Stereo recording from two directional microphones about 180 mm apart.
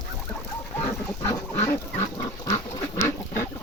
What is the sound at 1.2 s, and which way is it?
Pig, 15° left (ahead or behind).